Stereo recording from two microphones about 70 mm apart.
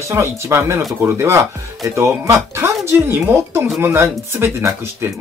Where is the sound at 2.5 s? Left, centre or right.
Right.